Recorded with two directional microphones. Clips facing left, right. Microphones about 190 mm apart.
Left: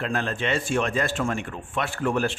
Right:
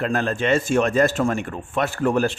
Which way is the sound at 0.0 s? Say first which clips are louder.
Right 5 dB; 45° right (ahead or behind).